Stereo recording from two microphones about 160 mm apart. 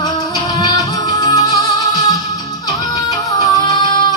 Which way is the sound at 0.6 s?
20° left (ahead or behind).